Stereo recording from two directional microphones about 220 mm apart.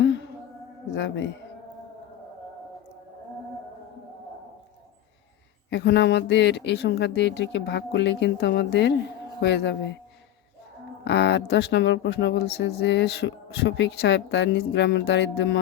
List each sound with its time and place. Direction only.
0.0 s a sound: 55° left (ahead or behind)
0.9 s speech: 55° left (ahead or behind)
5.7 s speech: 50° left (ahead or behind)
11.0 s speech: 50° left (ahead or behind)